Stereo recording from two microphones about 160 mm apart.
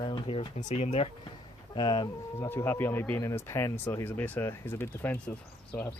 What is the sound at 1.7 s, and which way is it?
Speech, 25° left (ahead or behind).